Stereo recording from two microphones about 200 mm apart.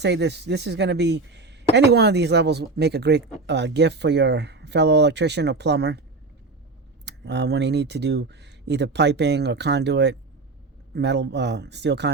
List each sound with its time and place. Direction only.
0.0 s speech: 60° right (ahead or behind)
7.0 s speech: 60° right (ahead or behind)